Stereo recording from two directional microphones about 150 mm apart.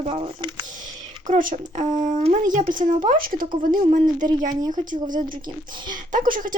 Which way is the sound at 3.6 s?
60° right (ahead or behind).